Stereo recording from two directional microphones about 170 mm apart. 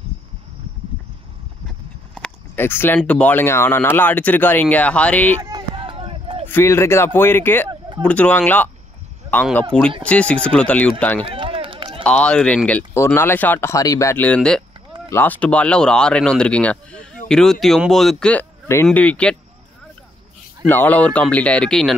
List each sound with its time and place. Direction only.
2.1 s a sound: 10° left (ahead or behind)
3.0 s speech: 5° left (ahead or behind)
5.4 s a sound: 25° right (ahead or behind)
6.5 s speech: 15° left (ahead or behind)
11.2 s run: 30° right (ahead or behind)
12.0 s speech: 5° left (ahead or behind)
20.6 s speech: 10° left (ahead or behind)